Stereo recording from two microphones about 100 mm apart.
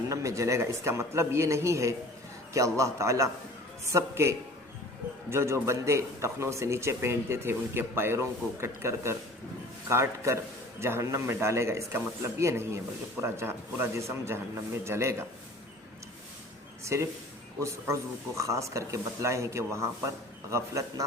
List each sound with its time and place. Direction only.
0.1 s a man's voice: 30° right (ahead or behind)
16.8 s a man's voice: 30° right (ahead or behind)